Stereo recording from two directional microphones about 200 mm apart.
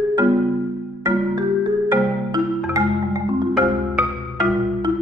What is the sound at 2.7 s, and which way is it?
Marimba, 15° right (ahead or behind).